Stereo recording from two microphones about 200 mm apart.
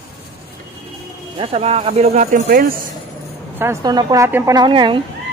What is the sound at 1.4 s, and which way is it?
Speech, 30° right (ahead or behind).